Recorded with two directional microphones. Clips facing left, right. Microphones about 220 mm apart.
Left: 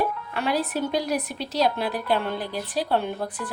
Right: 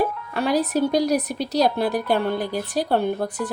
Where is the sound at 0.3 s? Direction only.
40° right (ahead or behind).